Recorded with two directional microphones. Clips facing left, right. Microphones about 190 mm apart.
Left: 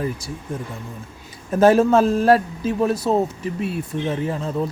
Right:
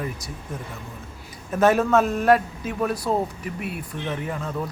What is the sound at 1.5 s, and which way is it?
A man's voice, 30° left (ahead or behind).